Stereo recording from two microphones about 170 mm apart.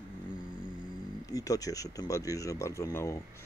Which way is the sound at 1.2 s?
20° left (ahead or behind).